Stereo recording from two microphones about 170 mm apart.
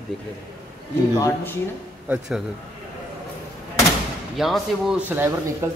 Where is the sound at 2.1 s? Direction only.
5° right (ahead or behind).